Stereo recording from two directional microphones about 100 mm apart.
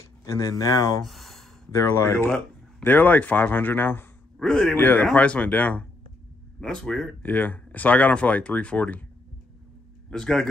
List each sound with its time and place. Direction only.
0.2 s speech: 35° left (ahead or behind)
1.0 s a sound: centre (ahead or behind)
2.0 s speech: 25° left (ahead or behind)
4.4 s speech: 5° left (ahead or behind)
4.7 s speech: 20° left (ahead or behind)
7.2 s speech: 15° left (ahead or behind)
10.0 s speech: 5° left (ahead or behind)